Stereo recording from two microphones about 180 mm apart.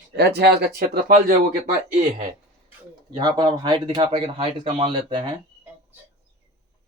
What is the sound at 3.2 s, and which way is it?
Speech, 25° right (ahead or behind).